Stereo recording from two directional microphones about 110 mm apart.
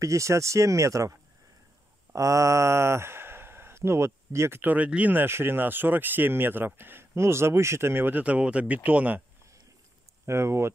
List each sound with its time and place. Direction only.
0.0 s speech: 30° right (ahead or behind)
2.1 s speech: 30° right (ahead or behind); by 9.2 s 15° right (ahead or behind)
10.2 s speech: 25° right (ahead or behind)